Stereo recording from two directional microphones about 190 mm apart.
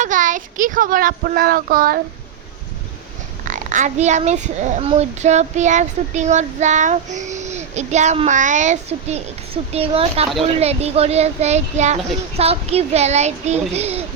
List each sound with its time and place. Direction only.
0.0 s speech: 40° right (ahead or behind)
3.4 s a child's voice: 45° right (ahead or behind)